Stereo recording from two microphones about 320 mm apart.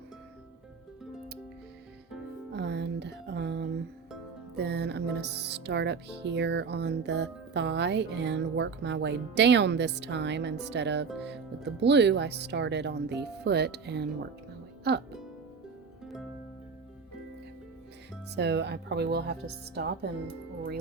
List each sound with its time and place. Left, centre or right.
2.5 s music: right
18.3 s music: right